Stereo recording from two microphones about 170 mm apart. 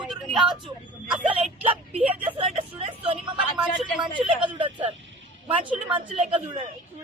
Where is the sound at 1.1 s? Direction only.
35° right (ahead or behind).